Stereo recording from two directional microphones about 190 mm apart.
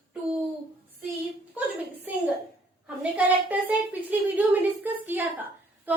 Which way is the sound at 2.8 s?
5° right (ahead or behind).